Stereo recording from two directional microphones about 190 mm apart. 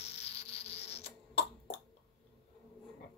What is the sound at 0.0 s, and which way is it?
Cough, 35° left (ahead or behind).